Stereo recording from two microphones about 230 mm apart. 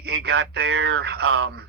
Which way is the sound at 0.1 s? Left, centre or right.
Right.